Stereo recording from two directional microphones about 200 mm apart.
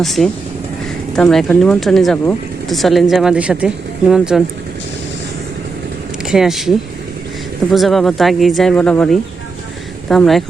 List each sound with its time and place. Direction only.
0.0 s speech: centre (ahead or behind)
6.2 s speech: centre (ahead or behind)
10.1 s speech: centre (ahead or behind)